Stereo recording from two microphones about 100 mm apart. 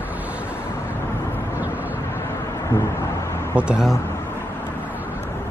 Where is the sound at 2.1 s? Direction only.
25° left (ahead or behind).